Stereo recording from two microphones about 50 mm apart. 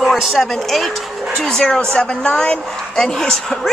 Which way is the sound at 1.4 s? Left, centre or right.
Centre.